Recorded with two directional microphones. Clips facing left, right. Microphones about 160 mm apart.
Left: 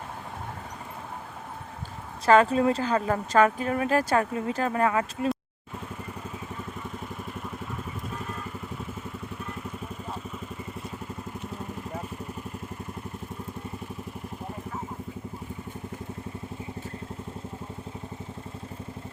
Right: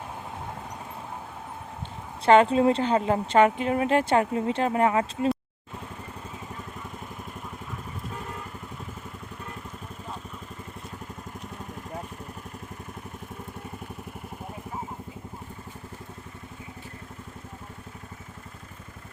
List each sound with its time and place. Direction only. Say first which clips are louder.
2.2 s a woman's voice: right 2 dB; 25° right (ahead or behind)